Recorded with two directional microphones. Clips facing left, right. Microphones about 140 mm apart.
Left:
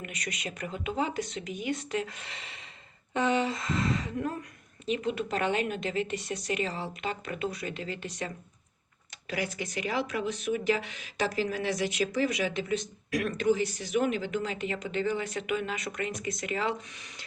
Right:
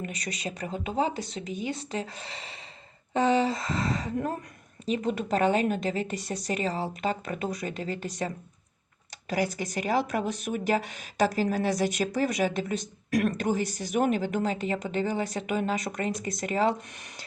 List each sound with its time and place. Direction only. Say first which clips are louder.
0.0 s a woman's voice: right 3 dB; 35° right (ahead or behind)
9.3 s a woman's voice: right 5 dB; 40° right (ahead or behind)